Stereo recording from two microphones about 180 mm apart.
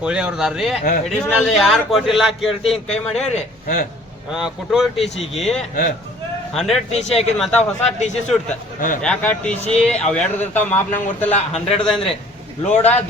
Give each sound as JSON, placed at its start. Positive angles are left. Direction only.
{"t": 0.0, "sound": "a man's voice", "side_deg": -5}
{"t": 3.3, "sound": "a man's voice", "side_deg": 45}
{"t": 4.3, "sound": "a man's voice", "side_deg": -5}
{"t": 11.3, "sound": "a man's voice", "side_deg": 35}
{"t": 11.8, "sound": "a man's voice", "side_deg": 5}